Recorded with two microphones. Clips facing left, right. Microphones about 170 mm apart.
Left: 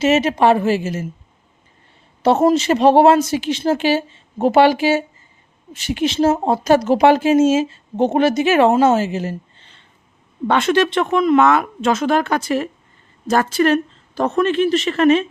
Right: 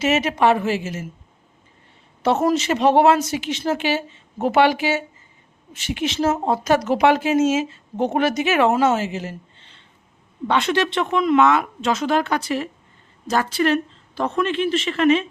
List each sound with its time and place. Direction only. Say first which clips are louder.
0.0 s speech: left 4 dB; 30° left (ahead or behind)
2.2 s speech: left 5 dB; 30° left (ahead or behind)